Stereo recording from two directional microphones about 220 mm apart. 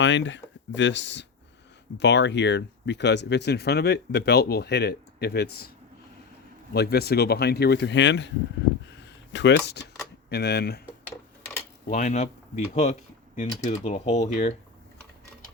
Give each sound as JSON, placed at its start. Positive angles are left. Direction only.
{"t": 0.0, "sound": "speech", "side_deg": 55}
{"t": 6.7, "sound": "speech", "side_deg": 45}
{"t": 9.0, "sound": "a sound", "side_deg": 55}
{"t": 10.2, "sound": "speech", "side_deg": 45}
{"t": 11.9, "sound": "speech", "side_deg": 35}